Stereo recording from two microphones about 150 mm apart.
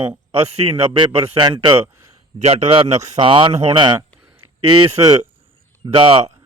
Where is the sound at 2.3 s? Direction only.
45° right (ahead or behind).